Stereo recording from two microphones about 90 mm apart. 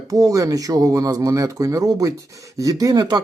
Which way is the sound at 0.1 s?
40° right (ahead or behind).